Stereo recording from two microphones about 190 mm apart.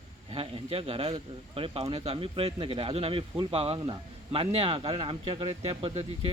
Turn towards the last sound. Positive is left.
turn(degrees=-30)  # may be behind; listen again after turning